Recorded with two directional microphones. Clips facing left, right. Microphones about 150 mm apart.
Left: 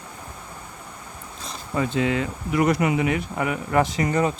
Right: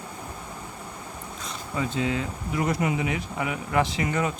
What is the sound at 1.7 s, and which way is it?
Speech, 65° left (ahead or behind).